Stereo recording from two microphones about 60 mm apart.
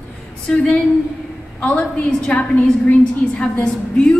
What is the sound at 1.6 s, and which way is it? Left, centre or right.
A woman's voice, centre.